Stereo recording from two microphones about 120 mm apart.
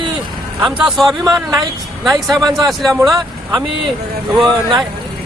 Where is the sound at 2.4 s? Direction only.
30° right (ahead or behind).